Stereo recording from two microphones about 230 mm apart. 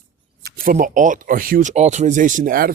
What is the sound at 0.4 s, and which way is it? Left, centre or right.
Speech, right.